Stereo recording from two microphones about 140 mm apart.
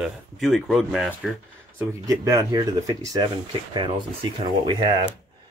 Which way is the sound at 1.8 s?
20° right (ahead or behind).